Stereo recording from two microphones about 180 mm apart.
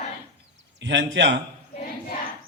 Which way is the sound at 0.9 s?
90° right.